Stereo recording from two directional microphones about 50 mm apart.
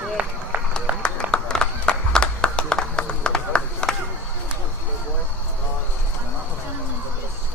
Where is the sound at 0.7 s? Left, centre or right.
Centre.